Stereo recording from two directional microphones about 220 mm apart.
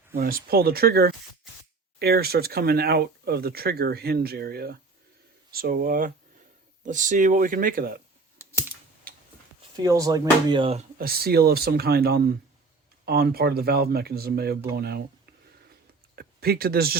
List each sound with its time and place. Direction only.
0.2 s speech: 40° right (ahead or behind)
9.7 s speech: 15° right (ahead or behind)
10.9 s speech: 45° right (ahead or behind)